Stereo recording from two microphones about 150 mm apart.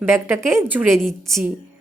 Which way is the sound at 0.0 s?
15° right (ahead or behind).